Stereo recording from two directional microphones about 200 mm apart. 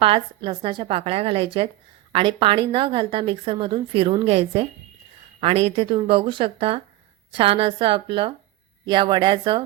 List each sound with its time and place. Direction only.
0.0 s a woman's voice: 25° right (ahead or behind)